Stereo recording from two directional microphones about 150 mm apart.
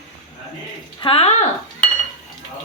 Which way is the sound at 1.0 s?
40° left (ahead or behind).